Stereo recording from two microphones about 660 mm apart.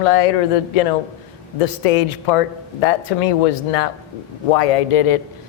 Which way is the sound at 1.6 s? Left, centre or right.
Left.